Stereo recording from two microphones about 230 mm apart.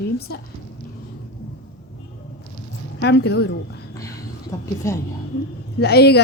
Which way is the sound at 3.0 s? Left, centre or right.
Left.